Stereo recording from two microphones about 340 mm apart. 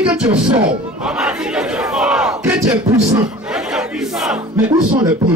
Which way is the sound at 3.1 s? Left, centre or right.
Centre.